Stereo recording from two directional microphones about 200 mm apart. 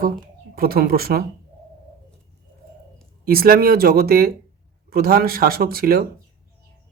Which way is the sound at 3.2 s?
50° right (ahead or behind).